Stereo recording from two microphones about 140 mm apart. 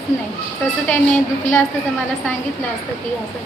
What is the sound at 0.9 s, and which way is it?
Speech, 15° left (ahead or behind).